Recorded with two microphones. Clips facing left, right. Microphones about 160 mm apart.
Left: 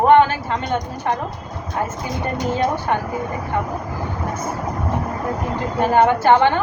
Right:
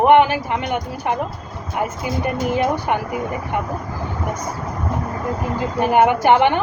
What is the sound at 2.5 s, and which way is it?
Speech, 15° right (ahead or behind).